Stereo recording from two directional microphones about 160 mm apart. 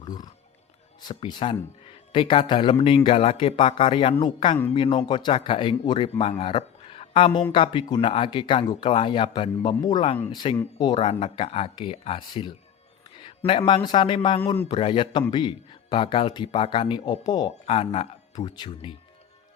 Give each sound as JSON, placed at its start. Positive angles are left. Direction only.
{"t": 0.0, "sound": "a man's voice", "side_deg": 25}